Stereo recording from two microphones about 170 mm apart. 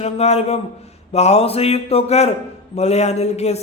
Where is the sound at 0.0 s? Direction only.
40° left (ahead or behind).